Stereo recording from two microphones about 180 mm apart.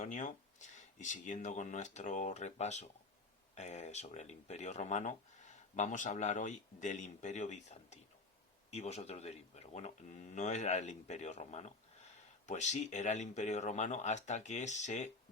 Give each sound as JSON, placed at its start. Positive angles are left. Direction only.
{"t": 0.0, "sound": "speech", "side_deg": 45}